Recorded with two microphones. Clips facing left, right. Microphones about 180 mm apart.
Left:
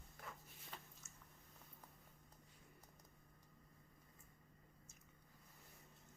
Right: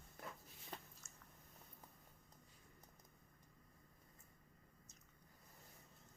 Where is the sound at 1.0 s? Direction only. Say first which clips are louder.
Even; 5° left (ahead or behind).